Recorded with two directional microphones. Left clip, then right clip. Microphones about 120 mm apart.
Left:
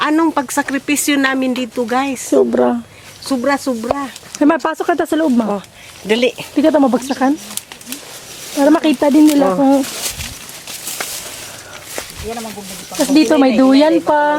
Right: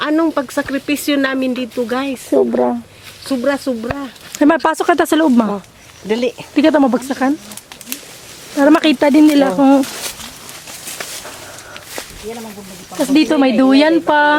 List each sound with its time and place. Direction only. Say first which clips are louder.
0.0 s speech: left 1 dB; centre (ahead or behind)
3.2 s speech: left 1 dB; 5° right (ahead or behind)
4.6 s speech: right 3 dB; 20° right (ahead or behind)
6.1 s speech: left 3 dB; 20° left (ahead or behind)
6.6 s speech: even; 15° right (ahead or behind)
8.5 s speech: right 1 dB; 35° right (ahead or behind)
13.0 s speech: left 1 dB; centre (ahead or behind)
14.1 s speech: right 1 dB; 25° right (ahead or behind)